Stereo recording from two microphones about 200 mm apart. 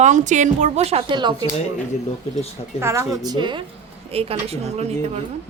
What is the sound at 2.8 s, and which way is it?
A woman's voice, 15° right (ahead or behind).